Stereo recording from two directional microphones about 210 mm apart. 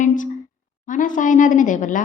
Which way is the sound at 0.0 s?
40° left (ahead or behind).